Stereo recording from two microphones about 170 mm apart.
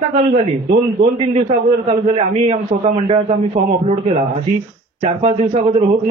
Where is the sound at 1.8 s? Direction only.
35° right (ahead or behind).